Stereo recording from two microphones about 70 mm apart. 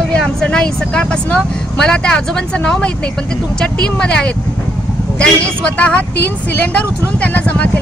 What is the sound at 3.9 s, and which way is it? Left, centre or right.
A woman's voice, centre.